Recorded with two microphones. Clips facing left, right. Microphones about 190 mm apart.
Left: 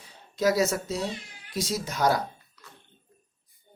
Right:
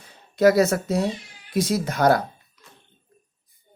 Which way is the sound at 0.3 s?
55° right (ahead or behind).